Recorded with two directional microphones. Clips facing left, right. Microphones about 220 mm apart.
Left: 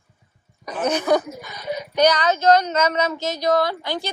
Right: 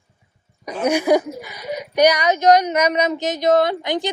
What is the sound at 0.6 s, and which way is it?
A woman's voice, 10° right (ahead or behind).